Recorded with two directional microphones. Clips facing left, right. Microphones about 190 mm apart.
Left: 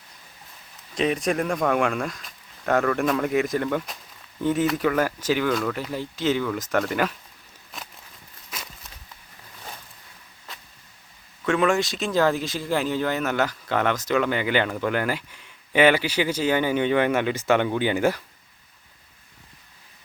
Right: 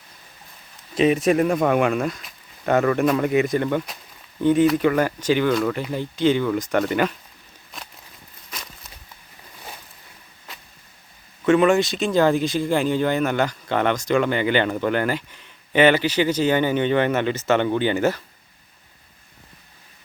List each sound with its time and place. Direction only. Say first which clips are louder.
0.9 s speech: right 6 dB; 5° right (ahead or behind)
8.4 s walk: even; 5° left (ahead or behind)
11.4 s speech: right 5 dB; centre (ahead or behind)